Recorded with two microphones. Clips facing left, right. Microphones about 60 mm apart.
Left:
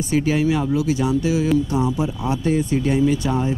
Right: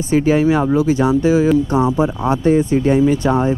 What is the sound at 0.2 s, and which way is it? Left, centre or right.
Speech, right.